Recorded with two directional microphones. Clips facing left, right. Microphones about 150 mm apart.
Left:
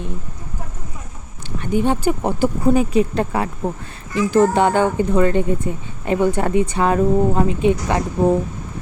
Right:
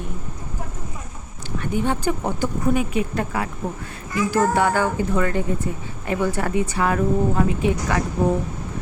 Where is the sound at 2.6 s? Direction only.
35° left (ahead or behind).